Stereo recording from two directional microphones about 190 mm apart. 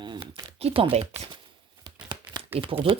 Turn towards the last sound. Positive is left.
turn(degrees=-30)  # may be behind; listen again after turning